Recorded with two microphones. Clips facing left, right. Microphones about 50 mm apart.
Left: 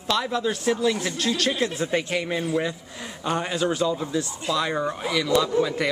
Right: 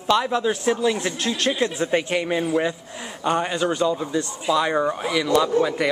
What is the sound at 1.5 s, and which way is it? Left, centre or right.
Speech, centre.